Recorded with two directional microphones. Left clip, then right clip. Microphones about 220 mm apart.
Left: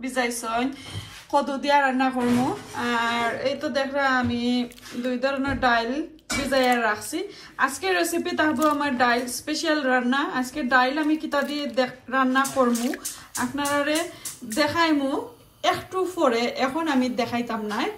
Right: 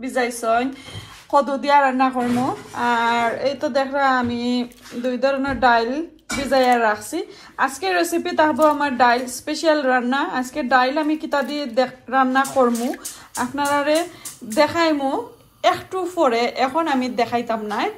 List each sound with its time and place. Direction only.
0.0 s speech: 5° left (ahead or behind)